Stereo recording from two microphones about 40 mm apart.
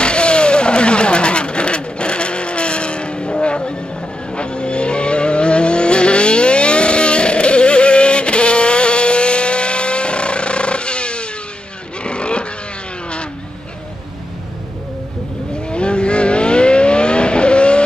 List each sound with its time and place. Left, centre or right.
0.0 s vehicle: left
15.7 s vehicle: left